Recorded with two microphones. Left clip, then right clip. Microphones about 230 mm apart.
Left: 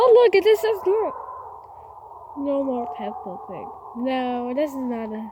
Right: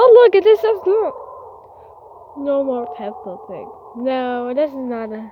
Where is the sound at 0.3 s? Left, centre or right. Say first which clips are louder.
Right 5 dB; left.